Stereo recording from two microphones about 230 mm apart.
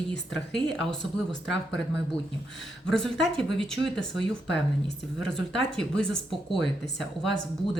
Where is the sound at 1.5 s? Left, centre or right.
Left.